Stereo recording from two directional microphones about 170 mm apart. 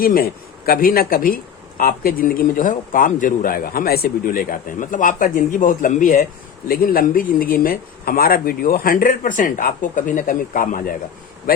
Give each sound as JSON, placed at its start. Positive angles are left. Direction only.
{"t": 0.0, "sound": "a man's voice", "side_deg": 60}